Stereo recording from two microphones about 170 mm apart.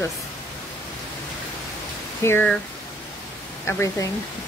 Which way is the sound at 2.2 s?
15° left (ahead or behind).